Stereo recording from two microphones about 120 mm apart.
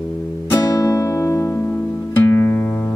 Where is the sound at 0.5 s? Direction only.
25° left (ahead or behind).